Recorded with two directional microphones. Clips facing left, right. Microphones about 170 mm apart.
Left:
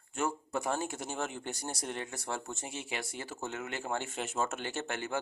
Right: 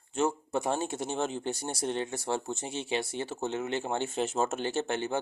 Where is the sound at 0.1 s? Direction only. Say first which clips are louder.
Right 5 dB; 25° right (ahead or behind).